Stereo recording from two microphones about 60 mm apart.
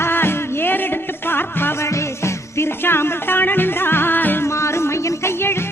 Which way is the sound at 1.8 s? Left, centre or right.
Left.